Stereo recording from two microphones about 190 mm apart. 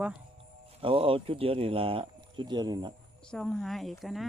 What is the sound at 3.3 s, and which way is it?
Speech, 5° left (ahead or behind).